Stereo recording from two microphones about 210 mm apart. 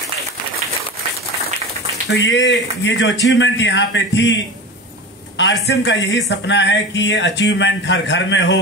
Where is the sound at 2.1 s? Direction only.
60° left (ahead or behind).